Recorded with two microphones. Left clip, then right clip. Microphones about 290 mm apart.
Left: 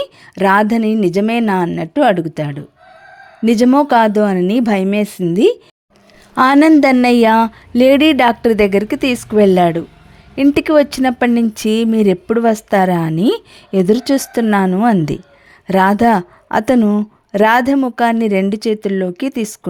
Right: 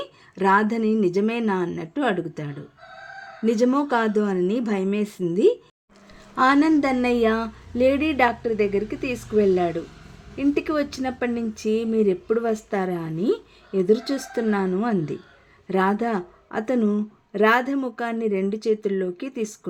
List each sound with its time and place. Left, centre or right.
0.0 s speech: left